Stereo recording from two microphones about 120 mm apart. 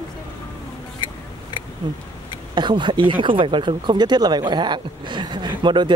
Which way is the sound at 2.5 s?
40° right (ahead or behind).